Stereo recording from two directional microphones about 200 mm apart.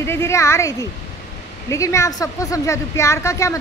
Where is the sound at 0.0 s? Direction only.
15° left (ahead or behind).